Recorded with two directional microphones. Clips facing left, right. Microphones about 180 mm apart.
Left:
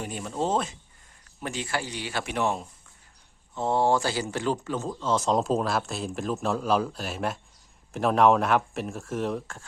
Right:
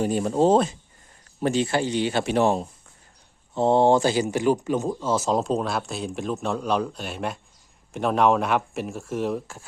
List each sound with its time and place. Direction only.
0.0 s speech: 35° right (ahead or behind); by 9.6 s 5° right (ahead or behind)